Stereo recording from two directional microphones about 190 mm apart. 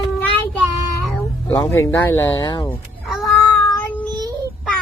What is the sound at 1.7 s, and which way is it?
Speech, 15° left (ahead or behind).